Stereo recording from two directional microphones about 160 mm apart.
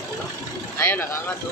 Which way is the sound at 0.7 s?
15° left (ahead or behind).